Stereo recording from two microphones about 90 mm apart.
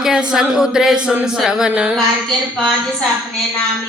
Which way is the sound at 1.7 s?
15° right (ahead or behind).